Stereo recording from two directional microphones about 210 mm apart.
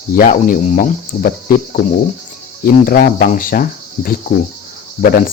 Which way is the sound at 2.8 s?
45° left (ahead or behind).